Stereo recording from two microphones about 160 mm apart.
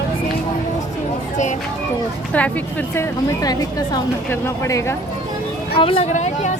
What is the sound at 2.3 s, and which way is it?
A woman's voice, 10° left (ahead or behind).